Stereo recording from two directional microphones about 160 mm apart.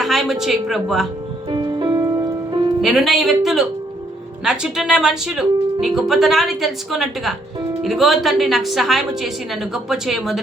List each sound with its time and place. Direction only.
0.0 s speech: centre (ahead or behind)
1.5 s music: 30° right (ahead or behind)
2.8 s speech: centre (ahead or behind)